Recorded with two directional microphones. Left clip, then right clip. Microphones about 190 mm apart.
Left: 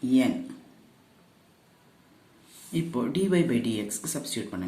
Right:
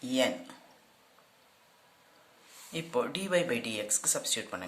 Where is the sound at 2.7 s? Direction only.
30° right (ahead or behind).